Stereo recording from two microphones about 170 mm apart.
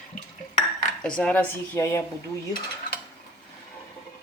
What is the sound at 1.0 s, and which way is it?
Speech, 5° left (ahead or behind).